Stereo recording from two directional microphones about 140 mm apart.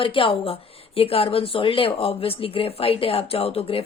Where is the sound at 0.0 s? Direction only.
40° left (ahead or behind).